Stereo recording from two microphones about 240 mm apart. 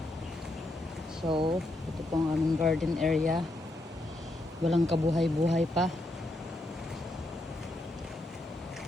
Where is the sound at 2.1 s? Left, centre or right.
Centre.